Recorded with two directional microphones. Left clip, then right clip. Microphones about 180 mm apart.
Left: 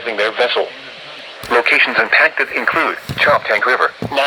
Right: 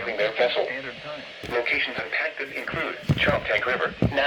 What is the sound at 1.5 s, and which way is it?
Speech, 55° left (ahead or behind).